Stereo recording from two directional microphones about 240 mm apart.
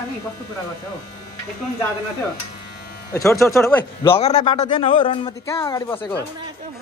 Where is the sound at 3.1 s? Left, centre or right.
Centre.